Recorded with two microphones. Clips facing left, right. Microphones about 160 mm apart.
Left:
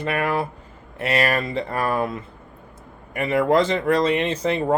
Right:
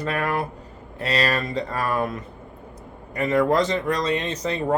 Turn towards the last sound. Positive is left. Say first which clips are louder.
# left 4 dB
turn(degrees=30)  # may be behind; listen again after turning